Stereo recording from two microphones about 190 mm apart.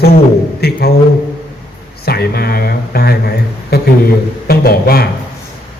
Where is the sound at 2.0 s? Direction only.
55° left (ahead or behind).